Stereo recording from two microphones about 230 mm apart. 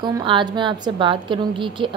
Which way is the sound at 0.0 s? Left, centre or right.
Right.